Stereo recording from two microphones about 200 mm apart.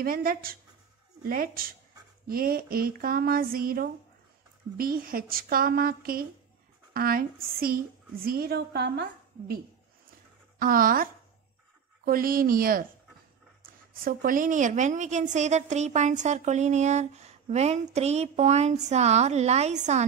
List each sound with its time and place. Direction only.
0.0 s speech: 45° right (ahead or behind)
10.6 s speech: 45° right (ahead or behind)
14.0 s a woman's voice: 45° right (ahead or behind)